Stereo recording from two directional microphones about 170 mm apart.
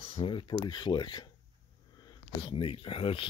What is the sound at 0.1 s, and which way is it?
Speech, 30° left (ahead or behind).